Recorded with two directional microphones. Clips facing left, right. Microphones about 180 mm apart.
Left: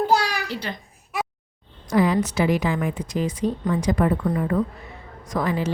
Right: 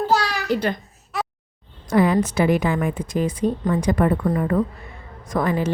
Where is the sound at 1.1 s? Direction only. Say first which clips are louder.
Right 1 dB; 10° left (ahead or behind).